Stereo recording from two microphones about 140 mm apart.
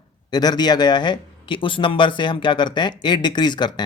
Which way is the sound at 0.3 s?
30° left (ahead or behind).